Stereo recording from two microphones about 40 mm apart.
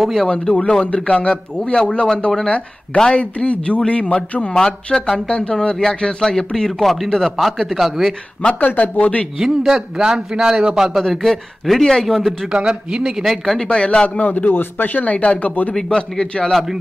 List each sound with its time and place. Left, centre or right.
0.0 s speech: centre
0.3 s speech: left
4.6 s a man's voice: centre
6.8 s a man's voice: centre
7.3 s speech: centre
8.5 s speech: left
9.4 s a man's voice: centre
11.0 s speech: centre
12.5 s a man's voice: right
13.7 s speech: left
14.4 s speech: left
15.0 s speech: left
15.7 s a man's voice: centre